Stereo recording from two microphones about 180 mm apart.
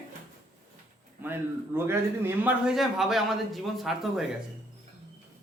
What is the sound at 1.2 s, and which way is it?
Speech, 10° right (ahead or behind).